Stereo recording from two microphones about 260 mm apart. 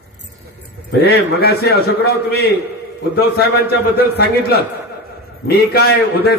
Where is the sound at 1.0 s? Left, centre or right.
Left.